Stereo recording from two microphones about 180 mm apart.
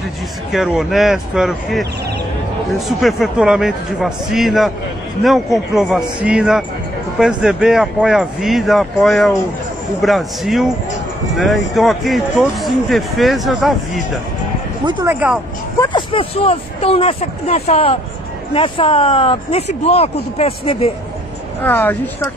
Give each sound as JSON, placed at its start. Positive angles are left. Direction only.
{"t": 0.5, "sound": "speech", "side_deg": 0}
{"t": 3.0, "sound": "speech", "side_deg": 0}
{"t": 5.8, "sound": "speech", "side_deg": -5}
{"t": 15.0, "sound": "speech", "side_deg": -10}
{"t": 15.9, "sound": "speech", "side_deg": 30}
{"t": 21.6, "sound": "speech", "side_deg": 10}